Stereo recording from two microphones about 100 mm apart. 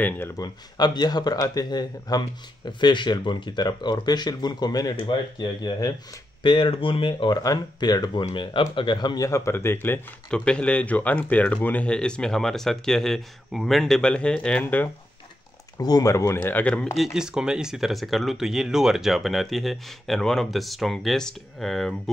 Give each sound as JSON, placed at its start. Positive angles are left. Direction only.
{"t": 0.4, "sound": "speech", "side_deg": 40}
{"t": 7.4, "sound": "speech", "side_deg": 40}
{"t": 10.3, "sound": "speech", "side_deg": 10}
{"t": 15.8, "sound": "speech", "side_deg": 35}
{"t": 16.3, "sound": "speech", "side_deg": 15}
{"t": 16.9, "sound": "speech", "side_deg": -5}